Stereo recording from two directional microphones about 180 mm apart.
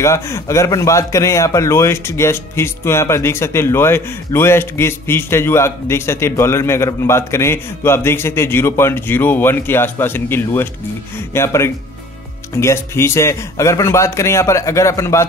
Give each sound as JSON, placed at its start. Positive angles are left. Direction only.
{"t": 0.0, "sound": "speech", "side_deg": 15}